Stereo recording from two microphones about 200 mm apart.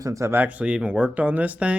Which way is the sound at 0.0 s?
15° right (ahead or behind).